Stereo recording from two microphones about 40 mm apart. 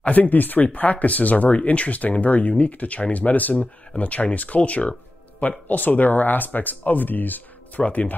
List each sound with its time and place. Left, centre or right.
0.0 s speech: left
3.5 s speech: left
5.7 s speech: left
7.8 s speech: left